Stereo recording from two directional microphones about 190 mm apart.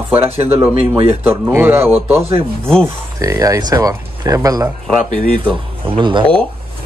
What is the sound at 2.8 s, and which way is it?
Speech, 15° right (ahead or behind).